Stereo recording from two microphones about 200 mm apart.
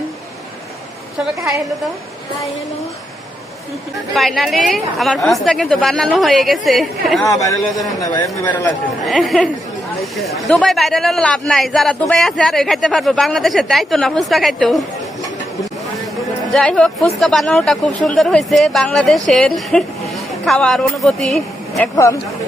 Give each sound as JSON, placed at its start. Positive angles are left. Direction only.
{"t": 4.1, "sound": "speech", "side_deg": 0}
{"t": 7.3, "sound": "a man's voice", "side_deg": 15}
{"t": 8.7, "sound": "speech", "side_deg": 0}
{"t": 16.5, "sound": "speech", "side_deg": 5}